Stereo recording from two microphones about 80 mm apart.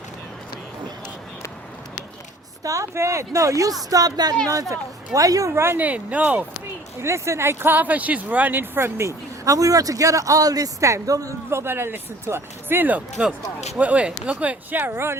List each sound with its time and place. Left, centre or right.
2.6 s speech: right
5.6 s speech: right
7.0 s speech: right
11.6 s speech: right